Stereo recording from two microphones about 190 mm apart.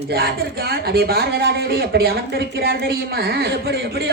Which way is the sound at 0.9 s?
55° right (ahead or behind).